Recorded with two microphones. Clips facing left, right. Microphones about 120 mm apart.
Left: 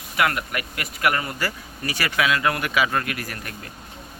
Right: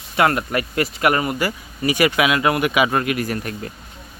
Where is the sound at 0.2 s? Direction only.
30° right (ahead or behind).